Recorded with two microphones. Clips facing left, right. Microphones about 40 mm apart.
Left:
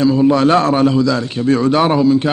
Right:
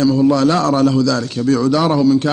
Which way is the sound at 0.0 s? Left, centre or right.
Left.